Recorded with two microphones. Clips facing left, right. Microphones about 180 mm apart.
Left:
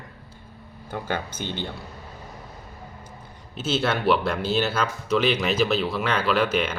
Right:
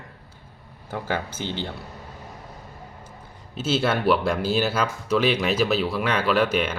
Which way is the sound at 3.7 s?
5° right (ahead or behind).